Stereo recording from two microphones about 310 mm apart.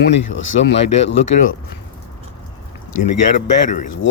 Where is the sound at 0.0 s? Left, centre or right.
Left.